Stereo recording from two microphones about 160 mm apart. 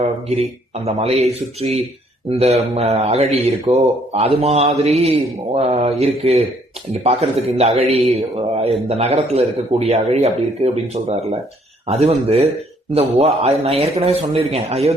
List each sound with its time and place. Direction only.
0.9 s speech: 40° right (ahead or behind)
2.3 s speech: 40° right (ahead or behind)